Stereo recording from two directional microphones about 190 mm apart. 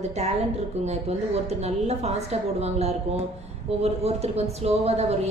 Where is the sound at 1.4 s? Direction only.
35° right (ahead or behind).